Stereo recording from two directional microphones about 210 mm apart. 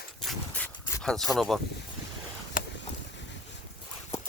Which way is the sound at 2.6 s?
40° left (ahead or behind).